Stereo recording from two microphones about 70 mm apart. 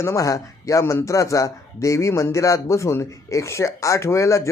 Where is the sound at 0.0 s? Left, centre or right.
Left.